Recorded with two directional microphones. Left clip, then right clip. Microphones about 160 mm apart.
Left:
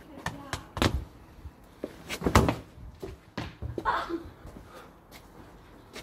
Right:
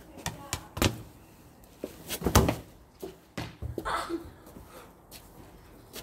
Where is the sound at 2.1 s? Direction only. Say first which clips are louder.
Left 1 dB; 20° right (ahead or behind).